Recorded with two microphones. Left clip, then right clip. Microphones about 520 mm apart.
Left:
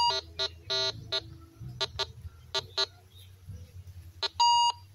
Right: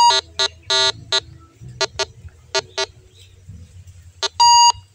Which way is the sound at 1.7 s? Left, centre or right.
Left.